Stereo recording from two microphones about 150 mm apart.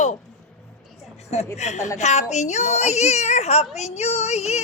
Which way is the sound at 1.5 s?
50° left (ahead or behind).